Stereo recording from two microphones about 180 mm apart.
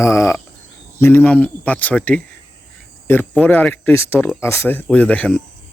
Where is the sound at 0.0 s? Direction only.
15° left (ahead or behind).